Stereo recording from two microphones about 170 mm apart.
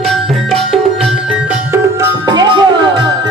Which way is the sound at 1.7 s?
20° right (ahead or behind).